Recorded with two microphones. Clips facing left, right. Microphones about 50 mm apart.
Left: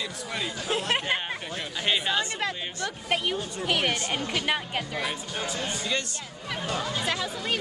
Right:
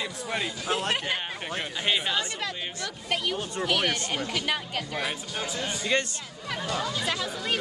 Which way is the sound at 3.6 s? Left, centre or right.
Centre.